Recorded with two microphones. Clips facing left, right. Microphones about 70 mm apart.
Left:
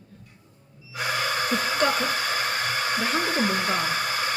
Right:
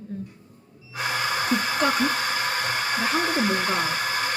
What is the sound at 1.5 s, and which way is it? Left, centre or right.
Speech, centre.